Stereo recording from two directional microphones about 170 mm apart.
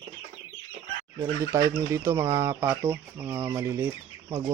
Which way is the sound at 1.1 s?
20° right (ahead or behind).